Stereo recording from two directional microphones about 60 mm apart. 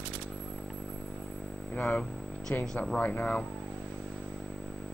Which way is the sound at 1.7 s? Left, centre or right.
Left.